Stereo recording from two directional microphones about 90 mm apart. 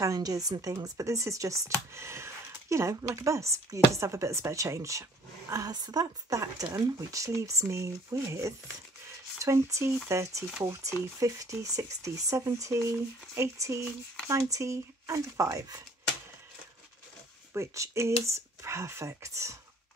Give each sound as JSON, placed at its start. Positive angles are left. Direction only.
{"t": 0.0, "sound": "speech", "side_deg": -40}
{"t": 17.6, "sound": "speech", "side_deg": -30}